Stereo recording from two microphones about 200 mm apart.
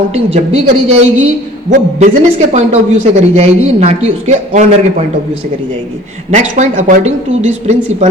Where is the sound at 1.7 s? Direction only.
40° right (ahead or behind).